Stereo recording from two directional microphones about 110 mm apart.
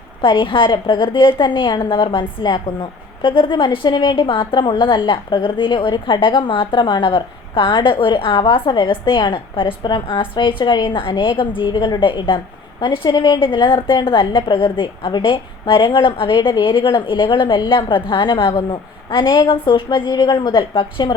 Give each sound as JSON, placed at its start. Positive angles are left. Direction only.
{"t": 0.2, "sound": "a woman's voice", "side_deg": 50}